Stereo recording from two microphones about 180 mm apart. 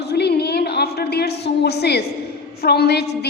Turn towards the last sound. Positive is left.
turn(degrees=65)  # may be behind; listen again after turning